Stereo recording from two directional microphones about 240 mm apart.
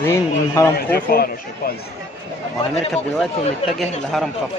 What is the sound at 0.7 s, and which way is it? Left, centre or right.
Speech, left.